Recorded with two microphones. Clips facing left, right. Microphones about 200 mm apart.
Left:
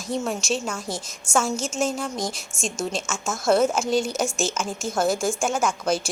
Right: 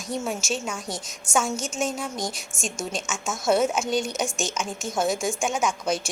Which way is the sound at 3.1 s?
Centre (ahead or behind).